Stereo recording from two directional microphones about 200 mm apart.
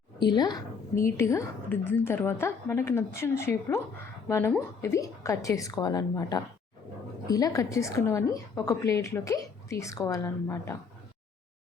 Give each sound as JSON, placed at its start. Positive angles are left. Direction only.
{"t": 0.2, "sound": "a woman's voice", "side_deg": 20}